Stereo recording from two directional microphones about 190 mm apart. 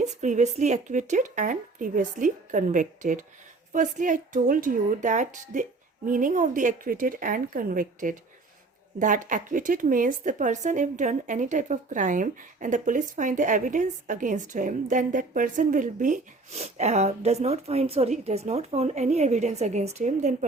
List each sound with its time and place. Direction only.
0.0 s speech: 40° right (ahead or behind)